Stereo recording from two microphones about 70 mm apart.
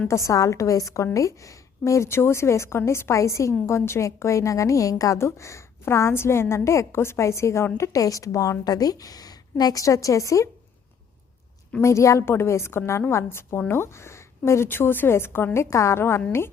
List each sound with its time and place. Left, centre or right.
0.3 s a woman's voice: left
7.8 s a woman's voice: left
11.8 s a woman's voice: left
15.7 s a woman's voice: left